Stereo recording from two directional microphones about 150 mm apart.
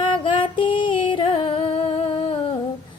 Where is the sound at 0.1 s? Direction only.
35° left (ahead or behind).